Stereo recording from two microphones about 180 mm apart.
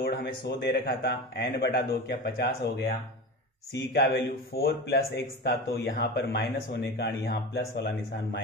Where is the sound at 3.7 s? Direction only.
75° left (ahead or behind).